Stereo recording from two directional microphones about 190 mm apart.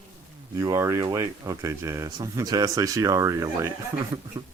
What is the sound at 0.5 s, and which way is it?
Speech, 15° right (ahead or behind).